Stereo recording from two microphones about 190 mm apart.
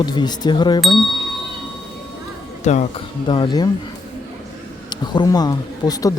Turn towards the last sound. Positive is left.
turn(degrees=20)  # may be behind; listen again after turning